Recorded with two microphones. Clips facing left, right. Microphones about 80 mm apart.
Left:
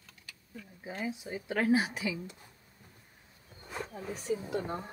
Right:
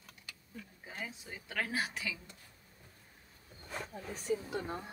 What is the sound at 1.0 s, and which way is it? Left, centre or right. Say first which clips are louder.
Speech: left 11 dB; centre.